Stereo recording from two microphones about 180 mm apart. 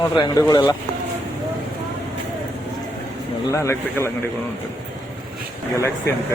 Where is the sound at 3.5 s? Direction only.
15° left (ahead or behind).